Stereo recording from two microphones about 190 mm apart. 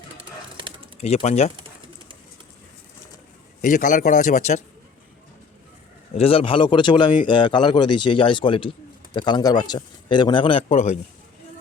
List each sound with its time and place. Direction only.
1.0 s a man's voice: 35° left (ahead or behind)
3.6 s a man's voice: 45° left (ahead or behind)
6.1 s speech: 30° left (ahead or behind)